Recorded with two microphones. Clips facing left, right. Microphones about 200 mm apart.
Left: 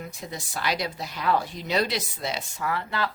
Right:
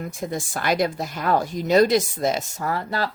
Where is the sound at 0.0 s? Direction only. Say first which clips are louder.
Right 8 dB; 50° right (ahead or behind).